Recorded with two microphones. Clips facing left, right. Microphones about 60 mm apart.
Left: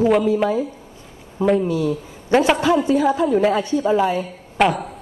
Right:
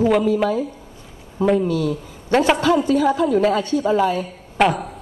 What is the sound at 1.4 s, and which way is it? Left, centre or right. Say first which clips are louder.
Speech: even; centre.